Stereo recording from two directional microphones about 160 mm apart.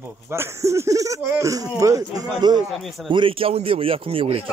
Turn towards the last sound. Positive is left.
turn(degrees=-35)  # may be behind; listen again after turning